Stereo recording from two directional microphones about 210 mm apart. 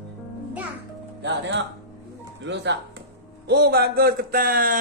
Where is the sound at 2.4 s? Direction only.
55° right (ahead or behind).